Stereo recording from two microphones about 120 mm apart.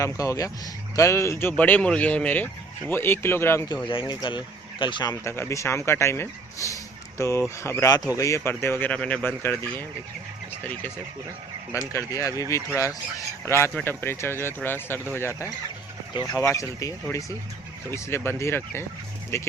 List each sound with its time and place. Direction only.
0.0 s speech: 25° left (ahead or behind)
3.8 s speech: 40° left (ahead or behind)
5.2 s speech: 20° left (ahead or behind)
11.9 s speech: 25° left (ahead or behind)